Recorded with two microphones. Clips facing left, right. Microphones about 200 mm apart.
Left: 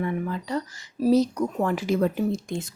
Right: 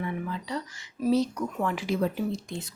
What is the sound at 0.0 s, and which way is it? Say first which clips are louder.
Speech: left 5 dB; 45° left (ahead or behind).